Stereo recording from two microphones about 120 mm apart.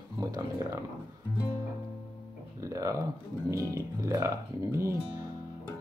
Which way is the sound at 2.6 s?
25° right (ahead or behind).